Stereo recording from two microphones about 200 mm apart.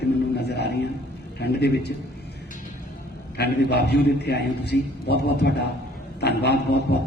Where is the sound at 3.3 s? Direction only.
55° left (ahead or behind).